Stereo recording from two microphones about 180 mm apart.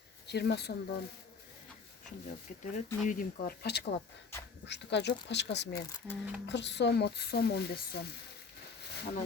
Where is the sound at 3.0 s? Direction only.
50° left (ahead or behind).